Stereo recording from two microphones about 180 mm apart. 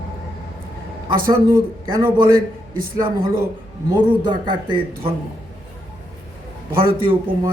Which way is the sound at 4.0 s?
25° right (ahead or behind).